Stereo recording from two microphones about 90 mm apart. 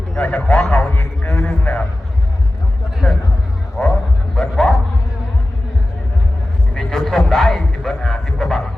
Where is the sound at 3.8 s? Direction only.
30° left (ahead or behind).